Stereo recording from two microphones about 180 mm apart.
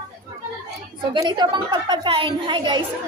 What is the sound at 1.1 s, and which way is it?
A woman's voice, 25° right (ahead or behind).